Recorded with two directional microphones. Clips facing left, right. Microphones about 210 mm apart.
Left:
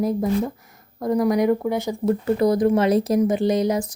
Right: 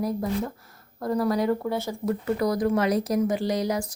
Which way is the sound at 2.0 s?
25° left (ahead or behind).